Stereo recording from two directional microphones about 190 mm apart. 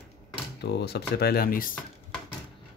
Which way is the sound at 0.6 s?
60° left (ahead or behind).